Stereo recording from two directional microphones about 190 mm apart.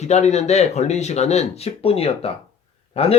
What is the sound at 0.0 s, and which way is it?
Speech, 35° left (ahead or behind).